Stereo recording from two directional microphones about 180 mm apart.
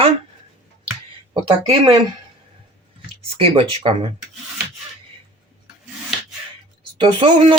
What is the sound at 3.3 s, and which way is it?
Speech, 30° right (ahead or behind).